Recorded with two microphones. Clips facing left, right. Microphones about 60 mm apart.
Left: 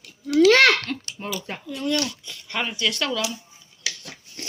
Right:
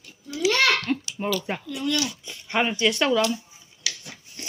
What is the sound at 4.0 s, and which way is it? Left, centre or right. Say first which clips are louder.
Scissors: left 2 dB; centre.